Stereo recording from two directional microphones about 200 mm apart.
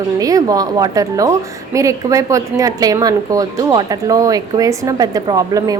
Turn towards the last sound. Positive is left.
turn(degrees=-15)  # may be behind; listen again after turning